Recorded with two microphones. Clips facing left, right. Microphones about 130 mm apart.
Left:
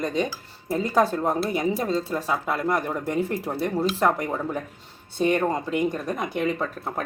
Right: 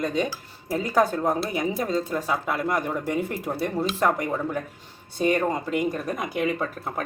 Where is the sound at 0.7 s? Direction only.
25° left (ahead or behind).